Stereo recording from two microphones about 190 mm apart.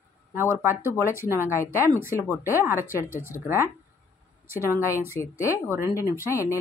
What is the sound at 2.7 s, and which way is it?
Speech, 10° right (ahead or behind).